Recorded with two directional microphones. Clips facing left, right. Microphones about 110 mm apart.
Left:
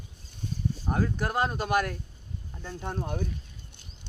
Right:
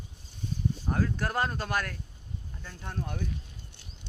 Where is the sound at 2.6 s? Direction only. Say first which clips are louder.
Left 5 dB; 30° left (ahead or behind).